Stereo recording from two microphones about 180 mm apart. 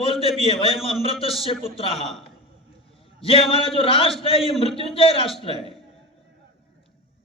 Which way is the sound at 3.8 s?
30° left (ahead or behind).